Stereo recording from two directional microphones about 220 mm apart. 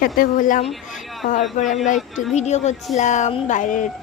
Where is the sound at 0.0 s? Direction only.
40° left (ahead or behind).